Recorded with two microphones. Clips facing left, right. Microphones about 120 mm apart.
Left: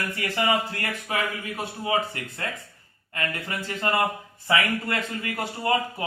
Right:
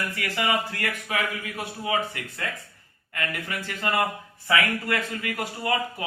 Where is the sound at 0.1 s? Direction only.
25° left (ahead or behind).